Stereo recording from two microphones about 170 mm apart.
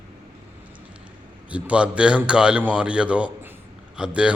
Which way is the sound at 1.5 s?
5° right (ahead or behind).